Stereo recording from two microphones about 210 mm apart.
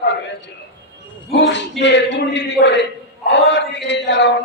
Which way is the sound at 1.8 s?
55° left (ahead or behind).